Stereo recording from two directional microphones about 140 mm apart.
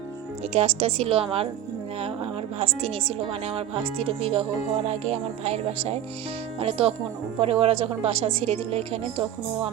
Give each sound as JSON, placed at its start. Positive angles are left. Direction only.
{"t": 0.5, "sound": "a woman's voice", "side_deg": -45}
{"t": 2.6, "sound": "a woman's voice", "side_deg": -45}